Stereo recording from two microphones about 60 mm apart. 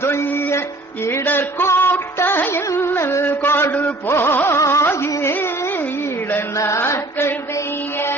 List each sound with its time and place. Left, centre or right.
0.0 s music: left
3.2 s a sound: left
4.1 s music: left
4.4 s carnatic music: left
4.9 s carnatic music: left
6.6 s mantra: left